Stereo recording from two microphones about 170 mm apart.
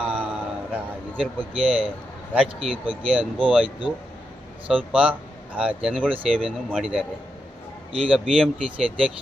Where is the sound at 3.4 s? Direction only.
10° right (ahead or behind).